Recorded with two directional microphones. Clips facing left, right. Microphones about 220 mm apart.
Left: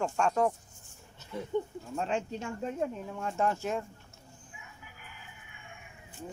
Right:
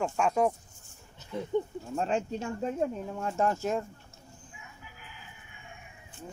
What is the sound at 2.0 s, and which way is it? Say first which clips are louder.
Speech: right 3 dB; 40° right (ahead or behind).